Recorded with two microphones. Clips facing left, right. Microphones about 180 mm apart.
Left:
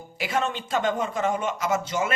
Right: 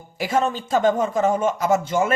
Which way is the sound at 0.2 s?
45° right (ahead or behind).